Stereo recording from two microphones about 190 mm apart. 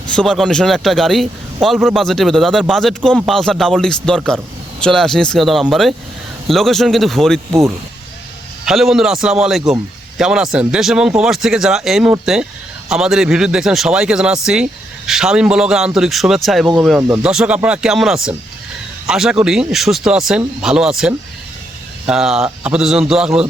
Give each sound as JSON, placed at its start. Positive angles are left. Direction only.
{"t": 0.1, "sound": "a man's voice", "side_deg": 5}
{"t": 8.6, "sound": "a man's voice", "side_deg": 0}